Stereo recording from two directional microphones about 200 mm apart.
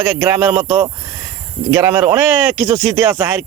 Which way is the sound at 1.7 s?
10° right (ahead or behind).